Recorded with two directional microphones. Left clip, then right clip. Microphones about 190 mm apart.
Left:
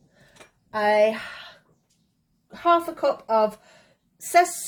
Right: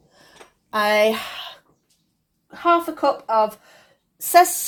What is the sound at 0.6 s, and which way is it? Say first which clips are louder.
Speech: right 2 dB; 45° right (ahead or behind).